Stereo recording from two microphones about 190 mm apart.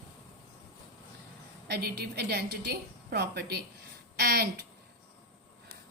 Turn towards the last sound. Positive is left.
turn(degrees=-55)  # may be behind; listen again after turning